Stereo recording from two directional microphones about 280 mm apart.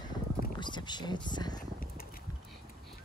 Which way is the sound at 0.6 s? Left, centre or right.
Centre.